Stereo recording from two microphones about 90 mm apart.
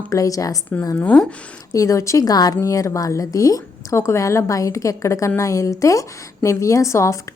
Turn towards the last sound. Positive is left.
turn(degrees=35)  # may be behind; listen again after turning